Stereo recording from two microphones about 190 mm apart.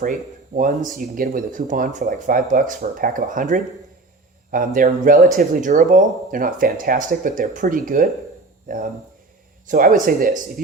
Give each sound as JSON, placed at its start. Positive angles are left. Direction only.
{"t": 0.5, "sound": "speech", "side_deg": -45}